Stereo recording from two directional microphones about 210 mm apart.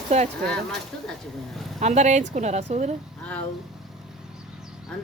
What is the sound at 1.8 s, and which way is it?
A woman's voice, 35° right (ahead or behind).